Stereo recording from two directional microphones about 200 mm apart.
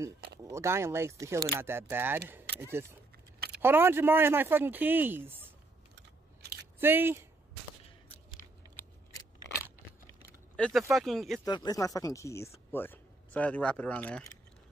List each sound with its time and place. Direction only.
0.4 s speech: 15° right (ahead or behind)
5.9 s chewing: 55° right (ahead or behind)
6.8 s speech: 10° right (ahead or behind)
10.5 s speech: centre (ahead or behind)
11.4 s speech: 20° left (ahead or behind)